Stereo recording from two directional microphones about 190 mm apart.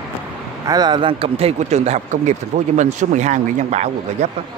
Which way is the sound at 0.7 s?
20° right (ahead or behind).